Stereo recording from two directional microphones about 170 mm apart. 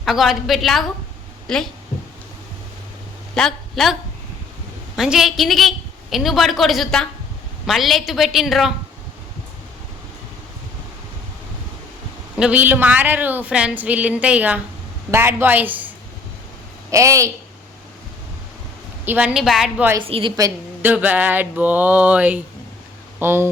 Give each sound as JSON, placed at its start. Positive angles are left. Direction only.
{"t": 0.0, "sound": "a woman's voice", "side_deg": 0}
{"t": 3.3, "sound": "a woman's voice", "side_deg": 0}
{"t": 4.9, "sound": "a woman's voice", "side_deg": 0}
{"t": 12.4, "sound": "a woman's voice", "side_deg": -10}
{"t": 16.9, "sound": "a woman's voice", "side_deg": -20}
{"t": 19.0, "sound": "a woman's voice", "side_deg": -10}
{"t": 20.0, "sound": "a woman's voice", "side_deg": -30}
{"t": 20.3, "sound": "a woman's voice", "side_deg": -20}
{"t": 20.9, "sound": "a woman's voice", "side_deg": -10}